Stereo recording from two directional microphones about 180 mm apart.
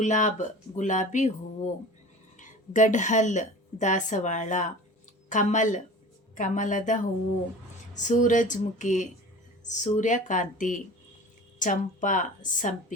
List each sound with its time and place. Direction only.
0.0 s speech: 40° left (ahead or behind)
2.4 s a woman's voice: 45° left (ahead or behind)